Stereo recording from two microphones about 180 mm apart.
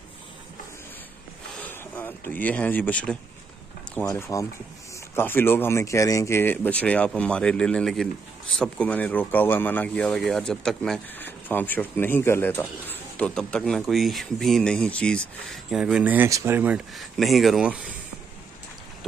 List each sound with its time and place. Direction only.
1.6 s speech: 10° left (ahead or behind); by 17.9 s 5° right (ahead or behind)